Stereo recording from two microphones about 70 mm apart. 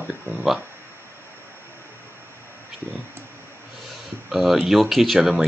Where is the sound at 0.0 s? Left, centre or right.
Right.